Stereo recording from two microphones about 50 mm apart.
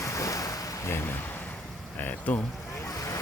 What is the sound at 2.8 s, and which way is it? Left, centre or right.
Boat, left.